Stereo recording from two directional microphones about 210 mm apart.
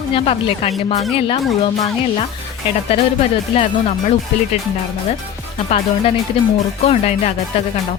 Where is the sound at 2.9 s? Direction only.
25° left (ahead or behind).